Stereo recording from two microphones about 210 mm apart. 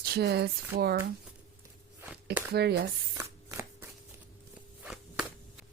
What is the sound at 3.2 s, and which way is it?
Shuffling cards, 15° right (ahead or behind).